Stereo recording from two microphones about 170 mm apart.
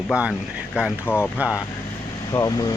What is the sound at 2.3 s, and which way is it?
Speech, 25° left (ahead or behind).